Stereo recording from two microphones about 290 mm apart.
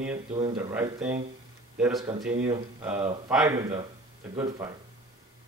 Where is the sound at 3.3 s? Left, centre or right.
Centre.